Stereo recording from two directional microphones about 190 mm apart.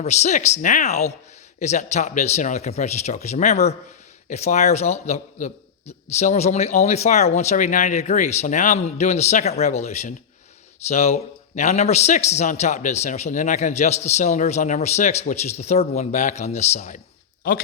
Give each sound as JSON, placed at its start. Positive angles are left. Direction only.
{"t": 0.0, "sound": "a man's voice", "side_deg": 35}